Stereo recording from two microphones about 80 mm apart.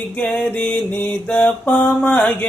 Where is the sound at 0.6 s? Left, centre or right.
Left.